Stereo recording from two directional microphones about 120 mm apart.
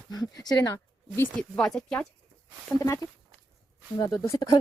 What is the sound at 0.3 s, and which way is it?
Speech, 30° left (ahead or behind).